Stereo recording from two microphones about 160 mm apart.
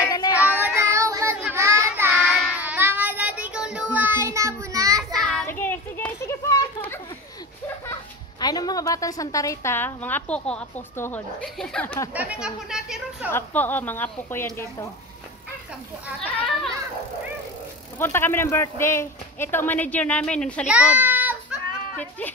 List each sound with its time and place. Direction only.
0.1 s child singing: 25° left (ahead or behind)
0.4 s child singing: 10° right (ahead or behind)
5.1 s a sound: 5° left (ahead or behind)
5.5 s children playing: 15° left (ahead or behind)
8.4 s a woman's voice: 25° left (ahead or behind); by 12.0 s 5° left (ahead or behind)
12.1 s speech: 10° right (ahead or behind)
13.3 s speech: 10° left (ahead or behind)
17.9 s speech: 15° left (ahead or behind)
20.6 s a sound: 5° right (ahead or behind)